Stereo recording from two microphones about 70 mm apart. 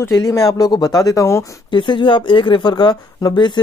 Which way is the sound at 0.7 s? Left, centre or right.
Left.